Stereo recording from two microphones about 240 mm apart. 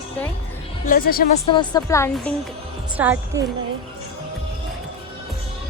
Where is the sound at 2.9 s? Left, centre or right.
Centre.